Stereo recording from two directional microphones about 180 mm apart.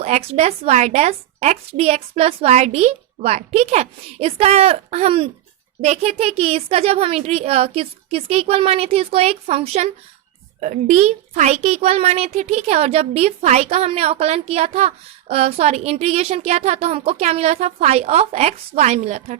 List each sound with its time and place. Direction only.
0.0 s a woman's voice: 35° right (ahead or behind)